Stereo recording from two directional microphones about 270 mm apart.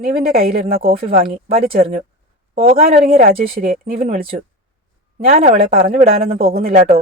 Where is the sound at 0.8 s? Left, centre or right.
Right.